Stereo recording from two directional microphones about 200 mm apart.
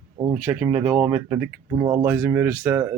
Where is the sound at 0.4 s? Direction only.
10° right (ahead or behind).